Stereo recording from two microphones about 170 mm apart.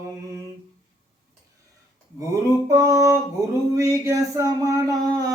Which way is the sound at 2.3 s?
20° right (ahead or behind).